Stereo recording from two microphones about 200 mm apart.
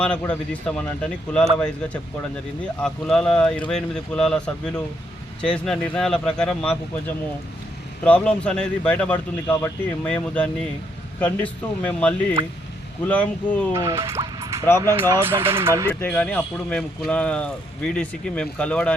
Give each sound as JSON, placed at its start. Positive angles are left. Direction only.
{"t": 0.0, "sound": "speech", "side_deg": 5}
{"t": 8.0, "sound": "speech", "side_deg": 5}
{"t": 13.7, "sound": "speech", "side_deg": -15}
{"t": 14.1, "sound": "music", "side_deg": -15}
{"t": 14.8, "sound": "speech", "side_deg": -15}
{"t": 15.9, "sound": "speech", "side_deg": 5}